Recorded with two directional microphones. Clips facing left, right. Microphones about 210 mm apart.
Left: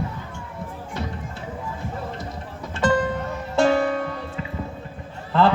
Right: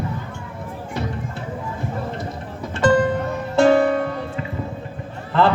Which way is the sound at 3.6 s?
60° right (ahead or behind).